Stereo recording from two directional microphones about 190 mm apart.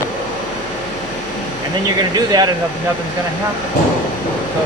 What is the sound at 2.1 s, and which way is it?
Speech, 20° right (ahead or behind).